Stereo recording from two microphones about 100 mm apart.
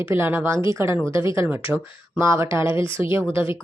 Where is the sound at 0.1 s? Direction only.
20° right (ahead or behind).